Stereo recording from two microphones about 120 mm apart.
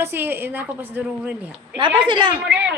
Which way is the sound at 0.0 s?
20° right (ahead or behind).